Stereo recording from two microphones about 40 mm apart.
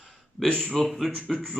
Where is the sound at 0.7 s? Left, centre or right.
Centre.